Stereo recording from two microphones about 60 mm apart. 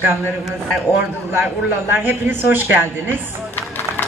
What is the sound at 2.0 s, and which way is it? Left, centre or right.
Speech, right.